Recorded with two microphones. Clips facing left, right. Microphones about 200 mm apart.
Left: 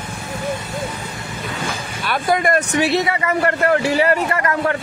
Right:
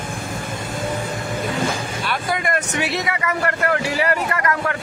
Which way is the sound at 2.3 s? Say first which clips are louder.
Left 7 dB; 40° left (ahead or behind).